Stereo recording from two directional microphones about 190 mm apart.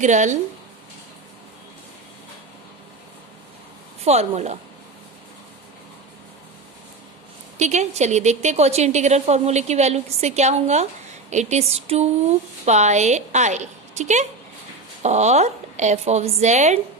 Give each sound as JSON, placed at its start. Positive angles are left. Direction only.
{"t": 0.0, "sound": "a woman's voice", "side_deg": -40}
{"t": 4.0, "sound": "a woman's voice", "side_deg": -35}
{"t": 7.6, "sound": "a woman's voice", "side_deg": -35}